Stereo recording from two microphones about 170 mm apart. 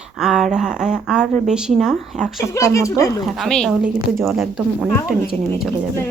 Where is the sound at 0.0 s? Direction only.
5° right (ahead or behind).